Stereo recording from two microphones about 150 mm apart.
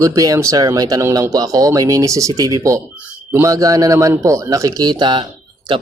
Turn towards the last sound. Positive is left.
turn(degrees=-35)  # may be behind; listen again after turning